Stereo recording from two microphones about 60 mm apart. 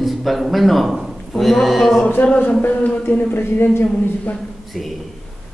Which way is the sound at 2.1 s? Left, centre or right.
Left.